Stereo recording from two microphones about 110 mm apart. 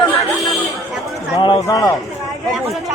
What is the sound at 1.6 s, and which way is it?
Speech, 30° left (ahead or behind).